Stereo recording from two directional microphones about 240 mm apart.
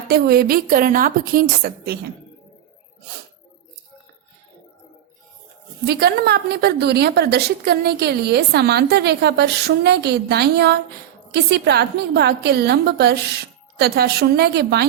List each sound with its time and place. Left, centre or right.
0.1 s a woman's voice: right
5.8 s a woman's voice: right